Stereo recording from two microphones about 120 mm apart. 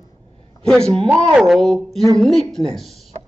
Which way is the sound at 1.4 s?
5° left (ahead or behind).